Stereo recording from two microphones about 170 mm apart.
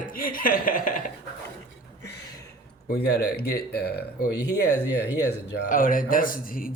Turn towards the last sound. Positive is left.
turn(degrees=55)  # may be behind; listen again after turning